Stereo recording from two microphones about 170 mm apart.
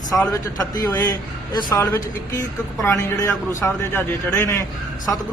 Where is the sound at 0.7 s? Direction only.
20° left (ahead or behind).